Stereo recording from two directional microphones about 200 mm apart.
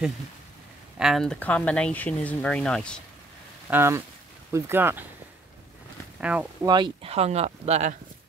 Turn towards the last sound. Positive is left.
turn(degrees=-35)  # may be behind; listen again after turning